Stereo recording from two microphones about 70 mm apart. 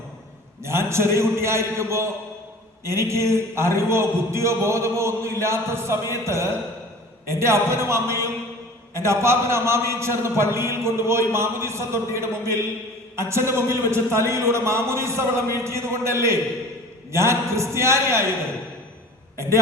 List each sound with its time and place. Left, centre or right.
0.6 s a man's voice: right